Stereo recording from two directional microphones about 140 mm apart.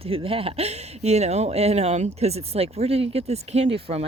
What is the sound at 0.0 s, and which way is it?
Speech, 40° right (ahead or behind).